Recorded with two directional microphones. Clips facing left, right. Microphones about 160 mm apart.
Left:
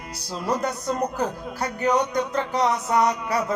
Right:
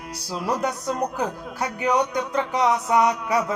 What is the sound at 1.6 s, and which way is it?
Speech, 10° right (ahead or behind).